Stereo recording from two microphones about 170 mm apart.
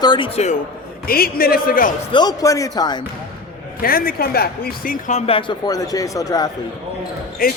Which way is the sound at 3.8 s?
60° left (ahead or behind).